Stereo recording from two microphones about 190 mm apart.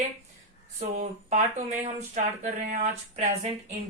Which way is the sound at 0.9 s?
40° right (ahead or behind).